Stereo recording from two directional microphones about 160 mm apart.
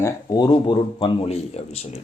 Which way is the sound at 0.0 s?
25° left (ahead or behind).